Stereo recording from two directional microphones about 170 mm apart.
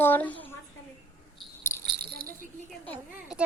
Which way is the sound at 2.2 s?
60° right (ahead or behind).